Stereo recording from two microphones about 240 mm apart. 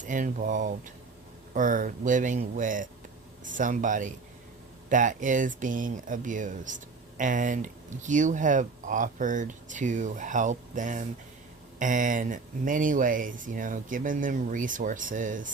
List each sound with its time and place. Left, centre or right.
0.0 s speech: right